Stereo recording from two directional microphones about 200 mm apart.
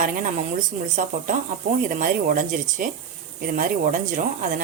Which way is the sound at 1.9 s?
40° right (ahead or behind).